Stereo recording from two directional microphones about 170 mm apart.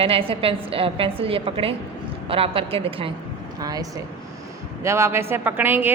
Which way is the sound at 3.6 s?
20° right (ahead or behind).